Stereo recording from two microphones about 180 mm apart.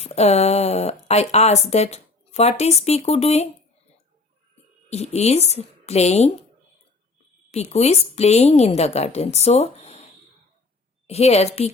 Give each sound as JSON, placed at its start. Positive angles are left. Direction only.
{"t": 0.0, "sound": "speech", "side_deg": 35}
{"t": 4.9, "sound": "speech", "side_deg": 35}
{"t": 7.5, "sound": "speech", "side_deg": 35}
{"t": 11.0, "sound": "speech", "side_deg": 35}